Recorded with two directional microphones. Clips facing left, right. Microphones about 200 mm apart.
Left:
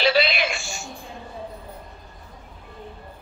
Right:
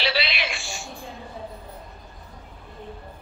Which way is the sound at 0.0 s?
45° left (ahead or behind).